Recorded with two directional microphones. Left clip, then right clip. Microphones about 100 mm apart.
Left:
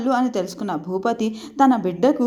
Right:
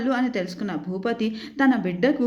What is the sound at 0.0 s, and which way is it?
A woman's voice, 40° left (ahead or behind).